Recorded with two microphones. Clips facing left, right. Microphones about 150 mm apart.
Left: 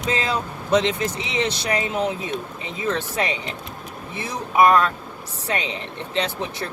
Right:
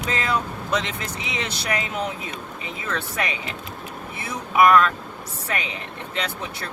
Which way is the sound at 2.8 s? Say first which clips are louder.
Left 4 dB; 25° left (ahead or behind).